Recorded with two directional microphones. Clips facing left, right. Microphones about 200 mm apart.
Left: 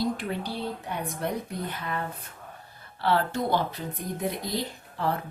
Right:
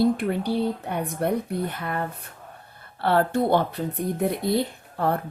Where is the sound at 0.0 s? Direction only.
60° right (ahead or behind).